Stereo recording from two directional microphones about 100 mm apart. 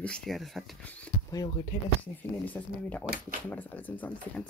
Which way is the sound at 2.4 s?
15° left (ahead or behind).